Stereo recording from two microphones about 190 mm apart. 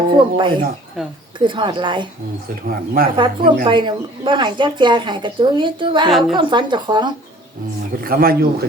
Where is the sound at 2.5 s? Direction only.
50° right (ahead or behind).